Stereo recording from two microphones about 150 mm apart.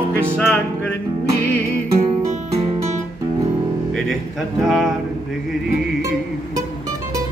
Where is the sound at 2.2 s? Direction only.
50° right (ahead or behind).